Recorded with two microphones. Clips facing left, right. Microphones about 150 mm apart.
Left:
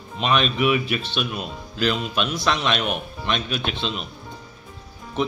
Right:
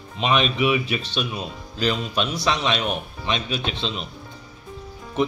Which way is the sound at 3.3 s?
55° left (ahead or behind).